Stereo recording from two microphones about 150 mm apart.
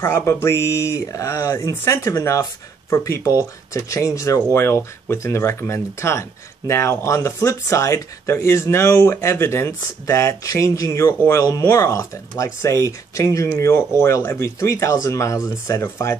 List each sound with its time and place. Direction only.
0.0 s speech: 15° left (ahead or behind)